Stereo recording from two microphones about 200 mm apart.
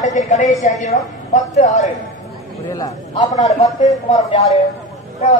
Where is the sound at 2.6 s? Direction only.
15° left (ahead or behind).